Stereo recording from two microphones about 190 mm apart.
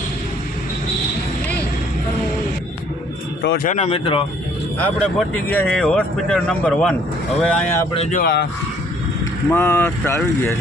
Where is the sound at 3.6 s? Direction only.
35° left (ahead or behind).